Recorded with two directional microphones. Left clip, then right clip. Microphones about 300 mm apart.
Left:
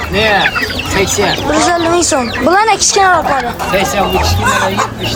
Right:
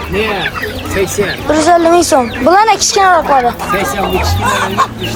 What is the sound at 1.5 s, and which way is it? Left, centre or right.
A man's voice, centre.